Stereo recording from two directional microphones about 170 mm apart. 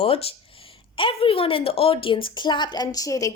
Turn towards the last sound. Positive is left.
turn(degrees=20)  # may be behind; listen again after turning